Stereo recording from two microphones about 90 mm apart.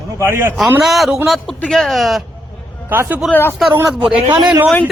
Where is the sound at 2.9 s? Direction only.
25° right (ahead or behind).